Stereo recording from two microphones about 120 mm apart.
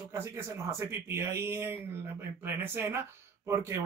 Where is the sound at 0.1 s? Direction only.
25° right (ahead or behind).